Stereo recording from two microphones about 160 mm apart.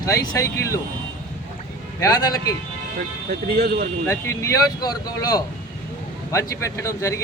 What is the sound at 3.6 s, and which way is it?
Speech, 70° right (ahead or behind).